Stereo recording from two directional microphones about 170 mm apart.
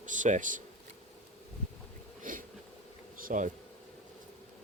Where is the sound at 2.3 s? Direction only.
50° right (ahead or behind).